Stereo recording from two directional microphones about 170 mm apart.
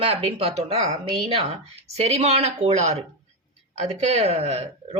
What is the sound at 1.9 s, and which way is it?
Speech, 40° right (ahead or behind).